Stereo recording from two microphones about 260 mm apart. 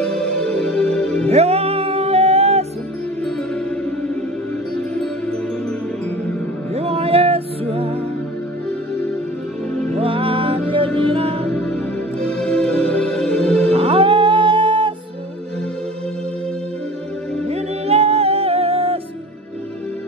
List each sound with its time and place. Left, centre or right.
0.0 s music: centre
1.3 s music: right
3.3 s music: centre
6.7 s music: right
9.9 s music: right
11.5 s music: centre
13.7 s music: right
17.5 s music: right